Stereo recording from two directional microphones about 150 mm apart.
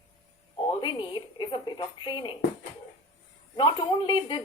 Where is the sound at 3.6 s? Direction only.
30° left (ahead or behind).